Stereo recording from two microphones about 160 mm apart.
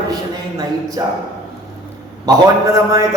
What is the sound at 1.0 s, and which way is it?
Speech, 25° right (ahead or behind).